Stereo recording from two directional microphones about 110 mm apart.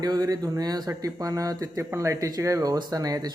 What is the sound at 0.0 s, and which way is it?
Speech, 35° right (ahead or behind).